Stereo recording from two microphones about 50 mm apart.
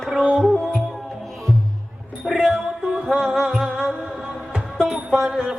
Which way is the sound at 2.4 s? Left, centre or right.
Centre.